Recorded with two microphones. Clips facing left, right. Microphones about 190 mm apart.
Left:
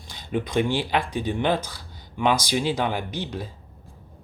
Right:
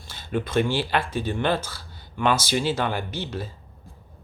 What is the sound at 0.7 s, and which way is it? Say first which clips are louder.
Speech: even; 15° left (ahead or behind).